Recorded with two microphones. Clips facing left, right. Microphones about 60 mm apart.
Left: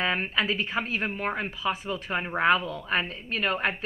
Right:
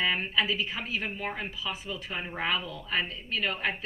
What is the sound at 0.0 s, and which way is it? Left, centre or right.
A woman's voice, left.